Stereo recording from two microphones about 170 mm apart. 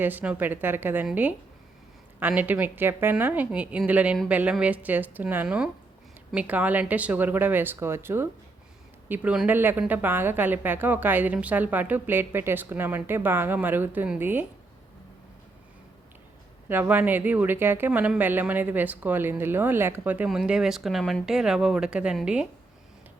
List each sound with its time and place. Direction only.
0.0 s speech: 10° right (ahead or behind)
16.6 s speech: 10° right (ahead or behind)